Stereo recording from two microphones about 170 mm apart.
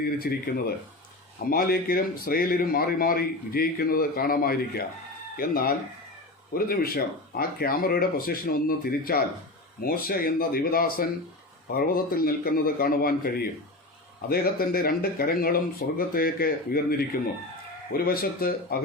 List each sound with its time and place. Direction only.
0.0 s a man's voice: 65° left (ahead or behind)